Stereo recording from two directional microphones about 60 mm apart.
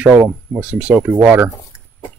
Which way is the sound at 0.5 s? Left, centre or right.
Centre.